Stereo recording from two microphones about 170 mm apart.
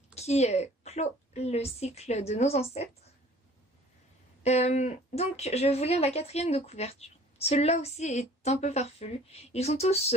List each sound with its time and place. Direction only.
0.1 s speech: 40° left (ahead or behind)
4.4 s speech: 40° left (ahead or behind)